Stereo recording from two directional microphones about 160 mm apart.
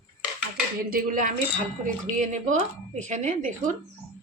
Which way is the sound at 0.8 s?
60° right (ahead or behind).